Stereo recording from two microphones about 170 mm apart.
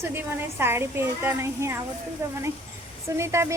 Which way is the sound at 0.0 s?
15° right (ahead or behind).